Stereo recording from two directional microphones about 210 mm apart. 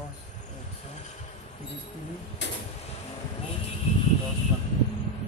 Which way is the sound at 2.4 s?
55° left (ahead or behind).